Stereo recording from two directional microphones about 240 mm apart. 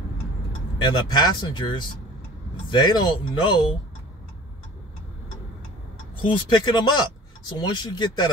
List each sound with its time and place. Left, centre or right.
0.8 s speech: centre
6.2 s speech: centre